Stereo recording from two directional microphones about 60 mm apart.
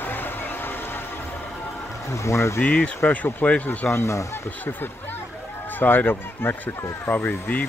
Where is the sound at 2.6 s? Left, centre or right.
Left.